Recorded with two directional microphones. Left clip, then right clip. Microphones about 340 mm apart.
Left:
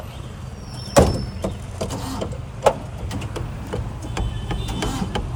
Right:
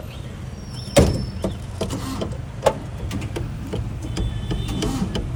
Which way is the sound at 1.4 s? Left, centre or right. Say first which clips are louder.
Right 1 dB; left.